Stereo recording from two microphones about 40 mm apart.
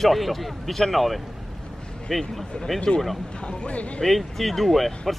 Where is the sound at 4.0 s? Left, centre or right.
Centre.